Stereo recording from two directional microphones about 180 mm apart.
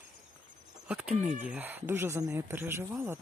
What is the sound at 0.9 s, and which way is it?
Speech, 5° right (ahead or behind).